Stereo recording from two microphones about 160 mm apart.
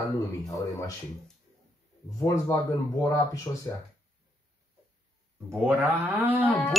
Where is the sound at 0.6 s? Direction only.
20° left (ahead or behind).